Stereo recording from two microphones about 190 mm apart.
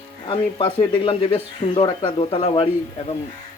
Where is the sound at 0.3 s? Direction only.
25° left (ahead or behind).